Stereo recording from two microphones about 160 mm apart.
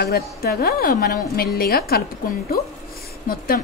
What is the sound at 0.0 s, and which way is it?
A woman's voice, 80° left.